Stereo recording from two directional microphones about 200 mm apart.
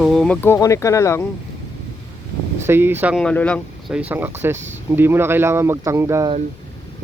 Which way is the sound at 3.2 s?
5° left (ahead or behind).